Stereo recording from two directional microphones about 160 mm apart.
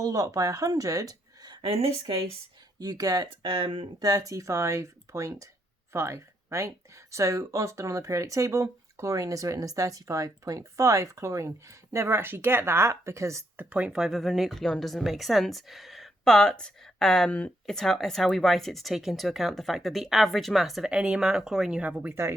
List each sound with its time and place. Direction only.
0.0 s speech: 20° right (ahead or behind)
2.7 s speech: 25° right (ahead or behind)
3.4 s speech: 35° right (ahead or behind)
4.1 s speech: 20° right (ahead or behind)